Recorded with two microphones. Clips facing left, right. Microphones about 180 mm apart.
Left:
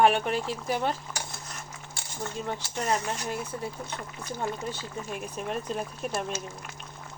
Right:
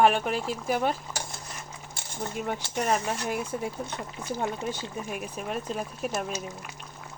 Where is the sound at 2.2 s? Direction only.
15° right (ahead or behind).